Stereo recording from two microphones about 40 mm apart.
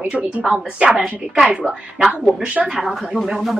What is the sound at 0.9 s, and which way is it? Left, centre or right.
Speech, right.